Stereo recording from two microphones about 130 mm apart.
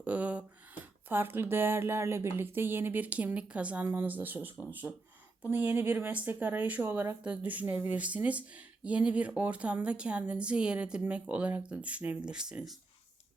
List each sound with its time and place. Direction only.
0.0 s speech: 10° right (ahead or behind)
4.6 s speech: 15° left (ahead or behind)
5.5 s speech: 15° right (ahead or behind)